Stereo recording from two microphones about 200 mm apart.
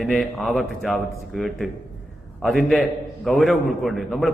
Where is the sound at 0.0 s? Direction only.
Centre (ahead or behind).